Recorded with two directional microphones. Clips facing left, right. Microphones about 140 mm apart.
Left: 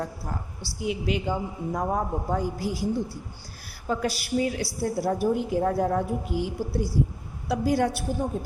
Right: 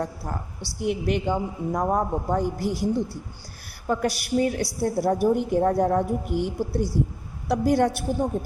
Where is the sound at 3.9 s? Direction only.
55° right (ahead or behind).